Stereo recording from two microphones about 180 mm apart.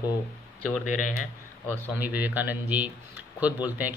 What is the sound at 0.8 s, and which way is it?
Speech, 45° left (ahead or behind).